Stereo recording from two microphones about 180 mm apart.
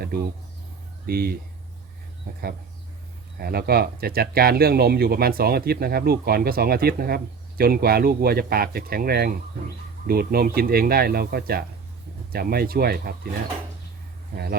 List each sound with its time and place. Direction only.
1.0 s speech: 55° right (ahead or behind)
3.4 s speech: 60° right (ahead or behind)